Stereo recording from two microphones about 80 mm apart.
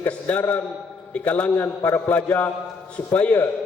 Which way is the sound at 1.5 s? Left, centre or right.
Left.